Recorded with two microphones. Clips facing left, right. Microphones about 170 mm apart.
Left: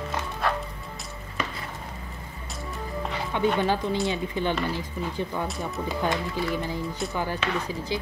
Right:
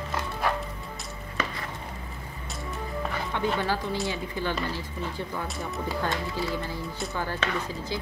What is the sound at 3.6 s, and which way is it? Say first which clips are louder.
Speech: left 4 dB; 20° left (ahead or behind).